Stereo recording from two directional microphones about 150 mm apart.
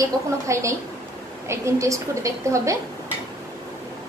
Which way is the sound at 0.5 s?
20° right (ahead or behind).